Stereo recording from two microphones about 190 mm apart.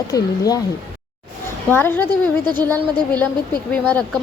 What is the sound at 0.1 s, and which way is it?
Speech, 20° left (ahead or behind).